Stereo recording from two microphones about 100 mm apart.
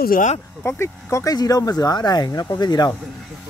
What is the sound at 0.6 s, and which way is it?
Speech, 25° left (ahead or behind).